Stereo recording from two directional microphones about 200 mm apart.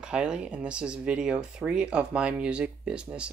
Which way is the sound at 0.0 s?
5° right (ahead or behind).